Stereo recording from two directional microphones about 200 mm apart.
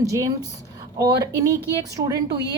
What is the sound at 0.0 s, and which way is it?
A woman's voice, 15° right (ahead or behind).